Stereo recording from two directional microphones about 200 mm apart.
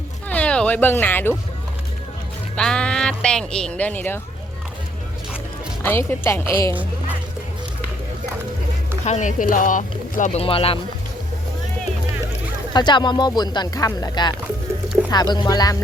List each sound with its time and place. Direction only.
0.3 s speech: 5° left (ahead or behind)
2.6 s speech: 5° left (ahead or behind)
5.8 s speech: 10° left (ahead or behind)
9.0 s speech: 35° left (ahead or behind)
12.7 s speech: 20° left (ahead or behind)